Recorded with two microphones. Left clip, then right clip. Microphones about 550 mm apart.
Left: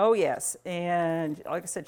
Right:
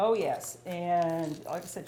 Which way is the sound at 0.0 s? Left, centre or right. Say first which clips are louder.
Left 4 dB; left.